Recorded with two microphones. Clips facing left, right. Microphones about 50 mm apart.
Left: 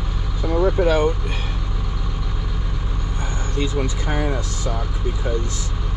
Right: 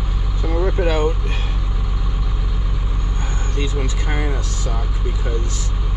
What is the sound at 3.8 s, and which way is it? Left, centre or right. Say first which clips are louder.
Speech: left 1 dB; right.